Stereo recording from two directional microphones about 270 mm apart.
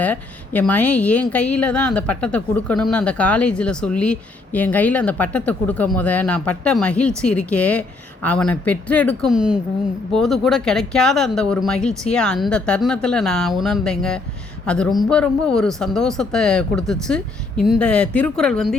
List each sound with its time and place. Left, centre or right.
0.0 s speech: centre